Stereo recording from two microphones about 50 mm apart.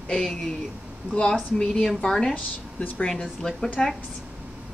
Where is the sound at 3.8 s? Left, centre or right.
Centre.